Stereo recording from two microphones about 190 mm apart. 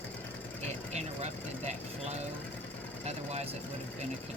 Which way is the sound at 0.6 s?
35° right (ahead or behind).